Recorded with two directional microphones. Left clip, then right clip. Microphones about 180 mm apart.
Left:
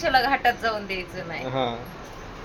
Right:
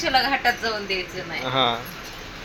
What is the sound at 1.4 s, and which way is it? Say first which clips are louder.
Speech: right 6 dB; 10° left (ahead or behind).